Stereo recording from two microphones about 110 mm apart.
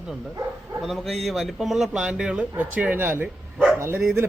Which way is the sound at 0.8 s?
Centre (ahead or behind).